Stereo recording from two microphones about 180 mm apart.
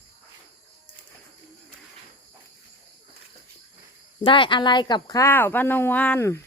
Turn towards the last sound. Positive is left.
turn(degrees=15)  # may be behind; listen again after turning